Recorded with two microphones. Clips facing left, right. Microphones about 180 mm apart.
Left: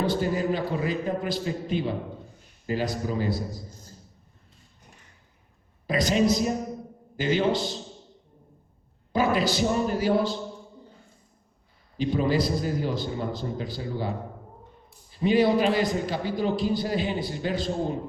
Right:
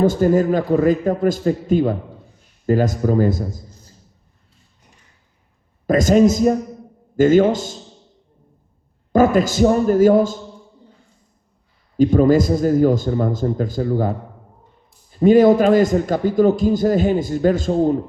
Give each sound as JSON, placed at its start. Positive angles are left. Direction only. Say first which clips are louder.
{"t": 0.0, "sound": "a man's voice", "louder": "right 10 dB", "side_deg": -45}
{"t": 5.9, "sound": "a man's voice", "louder": "right 9 dB", "side_deg": -45}
{"t": 9.1, "sound": "a man's voice", "louder": "right 9 dB", "side_deg": -45}
{"t": 11.9, "sound": "a man's voice", "louder": "right 11 dB", "side_deg": -45}
{"t": 15.2, "sound": "a man's voice", "louder": "right 10 dB", "side_deg": -45}